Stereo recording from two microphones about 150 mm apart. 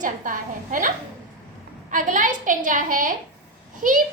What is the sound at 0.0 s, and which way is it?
A child's voice, 60° right (ahead or behind).